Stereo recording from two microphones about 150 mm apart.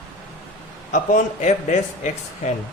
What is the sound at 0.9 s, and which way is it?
A man's voice, 55° left (ahead or behind).